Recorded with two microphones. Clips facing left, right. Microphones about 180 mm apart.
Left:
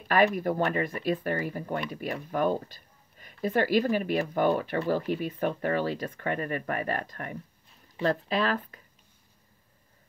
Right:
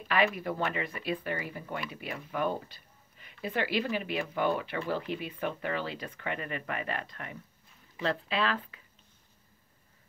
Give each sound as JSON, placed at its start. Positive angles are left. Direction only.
{"t": 0.1, "sound": "speech", "side_deg": 45}